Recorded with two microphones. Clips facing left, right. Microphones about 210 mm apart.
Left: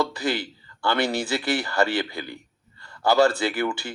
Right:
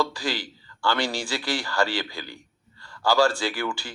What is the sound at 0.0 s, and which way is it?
A man's voice, 20° left (ahead or behind).